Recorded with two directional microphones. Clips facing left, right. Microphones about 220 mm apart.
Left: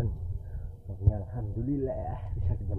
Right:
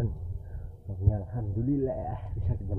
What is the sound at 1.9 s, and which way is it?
Speech, centre (ahead or behind).